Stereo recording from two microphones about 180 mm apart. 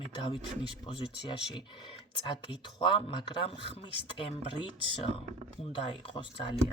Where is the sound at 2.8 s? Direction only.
25° left (ahead or behind).